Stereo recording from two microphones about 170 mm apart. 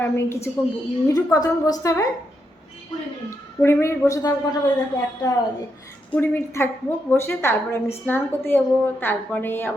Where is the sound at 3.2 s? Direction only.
15° left (ahead or behind).